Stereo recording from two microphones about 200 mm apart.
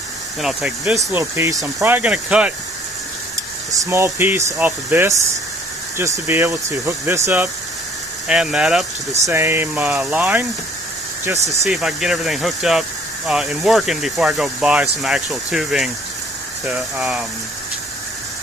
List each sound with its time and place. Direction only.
0.4 s speech: centre (ahead or behind)
3.7 s speech: 15° right (ahead or behind)
8.3 s speech: 5° right (ahead or behind)
11.6 s speech: centre (ahead or behind)